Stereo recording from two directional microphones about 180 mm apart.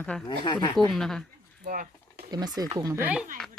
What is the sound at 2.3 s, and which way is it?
Speech, 20° right (ahead or behind).